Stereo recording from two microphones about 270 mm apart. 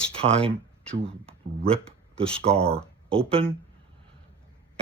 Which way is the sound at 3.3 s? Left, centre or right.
Right.